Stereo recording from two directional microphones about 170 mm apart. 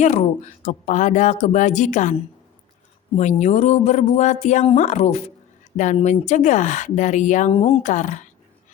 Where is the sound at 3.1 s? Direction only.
40° left (ahead or behind).